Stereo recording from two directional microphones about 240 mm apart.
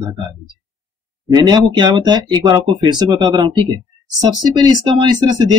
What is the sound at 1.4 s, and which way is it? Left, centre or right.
Speech, centre.